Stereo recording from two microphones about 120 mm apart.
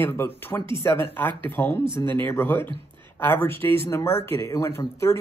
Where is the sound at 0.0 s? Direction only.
20° left (ahead or behind).